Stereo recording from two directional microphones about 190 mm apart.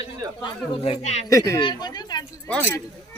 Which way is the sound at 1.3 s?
20° left (ahead or behind).